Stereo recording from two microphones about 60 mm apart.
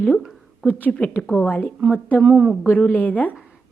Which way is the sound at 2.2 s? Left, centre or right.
Centre.